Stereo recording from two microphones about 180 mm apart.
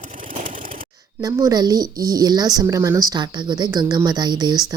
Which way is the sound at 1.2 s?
20° right (ahead or behind).